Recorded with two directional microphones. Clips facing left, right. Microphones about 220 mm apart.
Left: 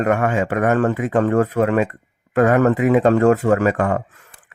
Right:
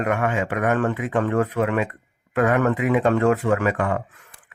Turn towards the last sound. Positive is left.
turn(degrees=45)  # may be behind; listen again after turning